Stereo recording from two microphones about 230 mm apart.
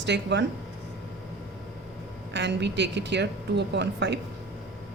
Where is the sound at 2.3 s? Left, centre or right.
Right.